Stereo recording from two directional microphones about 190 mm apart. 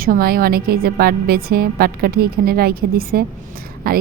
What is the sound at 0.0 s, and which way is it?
A woman's voice, 50° right (ahead or behind).